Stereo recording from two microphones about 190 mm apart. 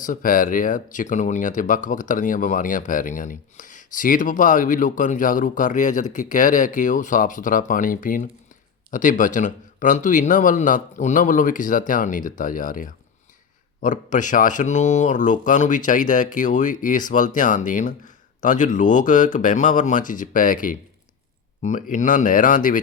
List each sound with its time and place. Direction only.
0.0 s speech: 45° left (ahead or behind)